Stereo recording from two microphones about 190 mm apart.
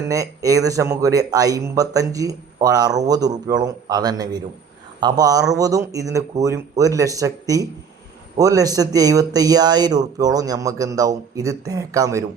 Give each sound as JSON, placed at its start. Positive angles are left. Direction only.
{"t": 0.1, "sound": "speech", "side_deg": -15}